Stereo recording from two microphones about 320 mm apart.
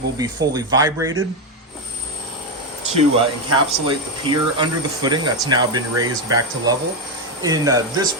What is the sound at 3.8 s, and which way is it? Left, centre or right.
Speech, centre.